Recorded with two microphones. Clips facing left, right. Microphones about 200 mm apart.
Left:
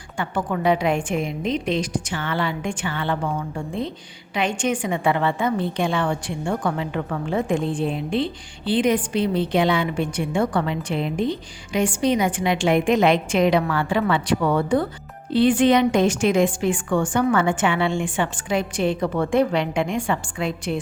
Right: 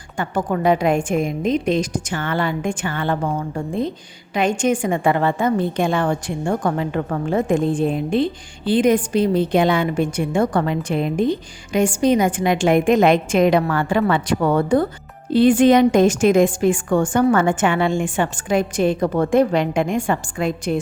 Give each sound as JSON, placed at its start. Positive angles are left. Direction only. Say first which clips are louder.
{"t": 0.2, "sound": "a woman's voice", "louder": "right 3 dB", "side_deg": -45}